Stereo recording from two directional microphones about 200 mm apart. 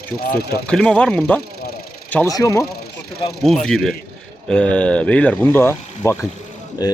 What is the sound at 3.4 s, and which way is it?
Speech, 5° left (ahead or behind).